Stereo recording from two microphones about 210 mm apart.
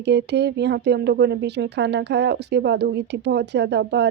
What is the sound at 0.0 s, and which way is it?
Speech, 55° right (ahead or behind).